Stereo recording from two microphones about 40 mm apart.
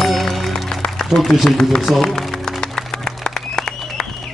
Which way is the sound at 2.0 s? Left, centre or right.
Centre.